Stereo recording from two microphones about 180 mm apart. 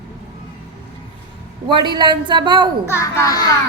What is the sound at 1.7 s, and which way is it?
A woman's voice, 25° right (ahead or behind).